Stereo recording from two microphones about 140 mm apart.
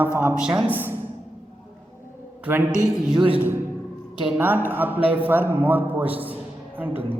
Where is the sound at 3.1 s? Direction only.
35° right (ahead or behind).